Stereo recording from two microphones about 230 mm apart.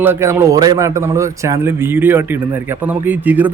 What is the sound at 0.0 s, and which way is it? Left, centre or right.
A man's voice, centre.